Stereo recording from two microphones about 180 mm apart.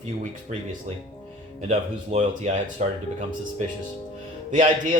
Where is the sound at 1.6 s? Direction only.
40° right (ahead or behind).